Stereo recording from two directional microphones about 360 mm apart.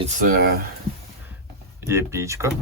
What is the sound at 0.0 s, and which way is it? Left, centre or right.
Speech, right.